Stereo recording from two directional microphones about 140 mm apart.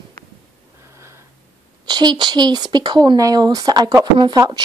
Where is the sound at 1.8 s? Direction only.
30° right (ahead or behind).